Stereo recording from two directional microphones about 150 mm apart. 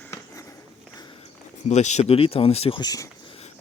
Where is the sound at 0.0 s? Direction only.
20° left (ahead or behind).